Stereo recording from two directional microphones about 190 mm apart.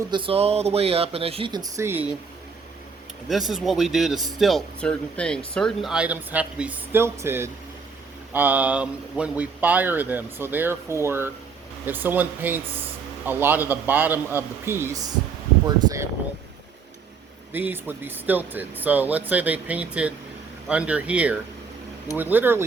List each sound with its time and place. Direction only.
0.1 s speech: 30° right (ahead or behind); by 2.1 s 10° right (ahead or behind)
3.2 s speech: centre (ahead or behind); by 16.0 s 15° right (ahead or behind)
17.5 s speech: 10° right (ahead or behind)